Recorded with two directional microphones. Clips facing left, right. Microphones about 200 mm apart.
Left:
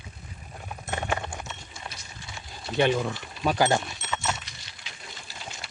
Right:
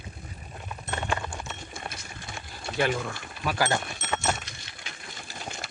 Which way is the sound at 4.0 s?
50° right (ahead or behind).